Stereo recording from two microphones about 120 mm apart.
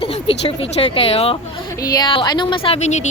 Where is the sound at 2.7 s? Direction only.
75° left (ahead or behind).